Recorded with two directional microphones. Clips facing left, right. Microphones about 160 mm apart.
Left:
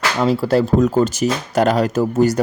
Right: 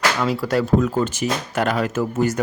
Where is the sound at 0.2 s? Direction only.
25° left (ahead or behind).